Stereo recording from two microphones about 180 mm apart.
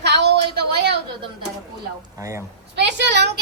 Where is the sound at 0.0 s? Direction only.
70° right (ahead or behind).